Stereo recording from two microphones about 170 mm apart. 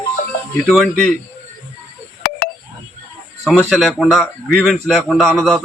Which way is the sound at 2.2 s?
60° left (ahead or behind).